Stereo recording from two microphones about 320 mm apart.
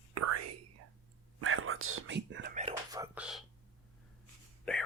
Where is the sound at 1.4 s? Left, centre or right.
Right.